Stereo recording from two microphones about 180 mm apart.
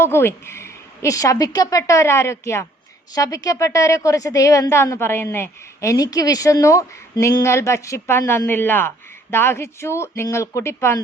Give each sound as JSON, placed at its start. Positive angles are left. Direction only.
{"t": 0.0, "sound": "a woman's voice", "side_deg": 15}